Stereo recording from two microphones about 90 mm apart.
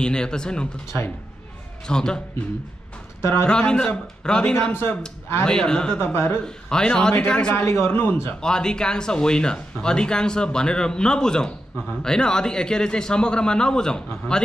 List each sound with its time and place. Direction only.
0.0 s speech: 10° left (ahead or behind)
1.9 s speech: 10° left (ahead or behind)
3.2 s speech: 30° left (ahead or behind)
3.4 s speech: 10° left (ahead or behind)
5.9 s a man's voice: 25° left (ahead or behind)
6.4 s speech: 10° left (ahead or behind)
7.5 s a man's voice: 30° left (ahead or behind)
8.4 s speech: 10° left (ahead or behind)